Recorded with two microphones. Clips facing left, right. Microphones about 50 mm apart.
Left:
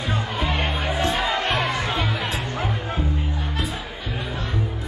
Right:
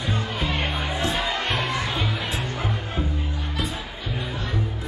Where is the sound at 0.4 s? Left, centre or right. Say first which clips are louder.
Left 3 dB; left.